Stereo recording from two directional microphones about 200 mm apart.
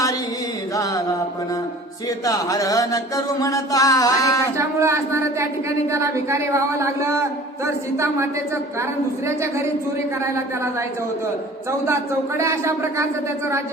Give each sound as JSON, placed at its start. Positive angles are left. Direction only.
{"t": 2.2, "sound": "music", "side_deg": 15}
{"t": 4.5, "sound": "speech", "side_deg": -15}
{"t": 12.4, "sound": "speech", "side_deg": -15}